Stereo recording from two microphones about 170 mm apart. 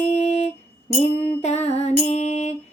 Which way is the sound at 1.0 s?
40° left (ahead or behind).